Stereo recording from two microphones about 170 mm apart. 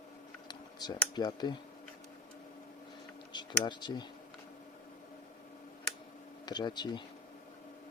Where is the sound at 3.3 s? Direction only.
25° left (ahead or behind).